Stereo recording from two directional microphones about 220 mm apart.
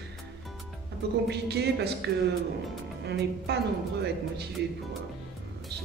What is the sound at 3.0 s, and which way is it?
Speech, 50° right (ahead or behind).